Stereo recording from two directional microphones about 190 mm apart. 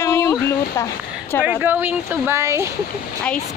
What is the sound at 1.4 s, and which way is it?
Speech, 10° right (ahead or behind).